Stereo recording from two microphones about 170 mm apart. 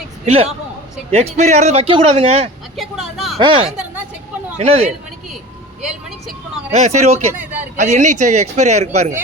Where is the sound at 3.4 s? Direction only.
30° right (ahead or behind).